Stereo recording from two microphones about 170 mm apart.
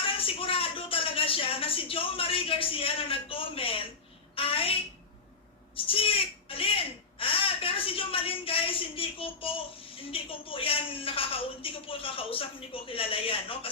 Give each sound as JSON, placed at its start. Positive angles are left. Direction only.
{"t": 0.0, "sound": "a woman's voice", "side_deg": 30}
{"t": 4.4, "sound": "a sound", "side_deg": 35}
{"t": 10.0, "sound": "a woman's voice", "side_deg": 35}